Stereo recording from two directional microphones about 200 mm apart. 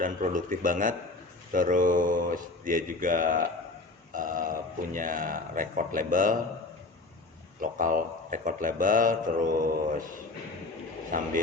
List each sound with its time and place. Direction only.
0.0 s mantra: 40° right (ahead or behind)
4.1 s speech: 40° right (ahead or behind)
7.6 s speech: 40° right (ahead or behind)
11.1 s speech: 40° right (ahead or behind)